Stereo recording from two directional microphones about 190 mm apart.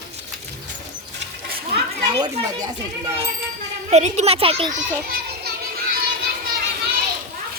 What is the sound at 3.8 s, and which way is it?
Speech, 35° right (ahead or behind).